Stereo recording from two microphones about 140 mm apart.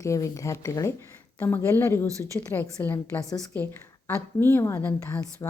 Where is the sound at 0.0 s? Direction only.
20° left (ahead or behind).